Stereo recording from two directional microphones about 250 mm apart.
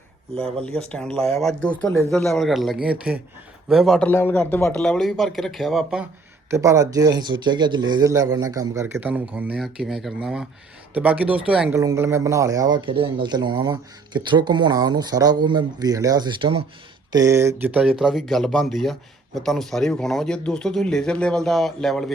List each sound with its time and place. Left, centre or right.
0.8 s speech: centre
6.5 s speech: centre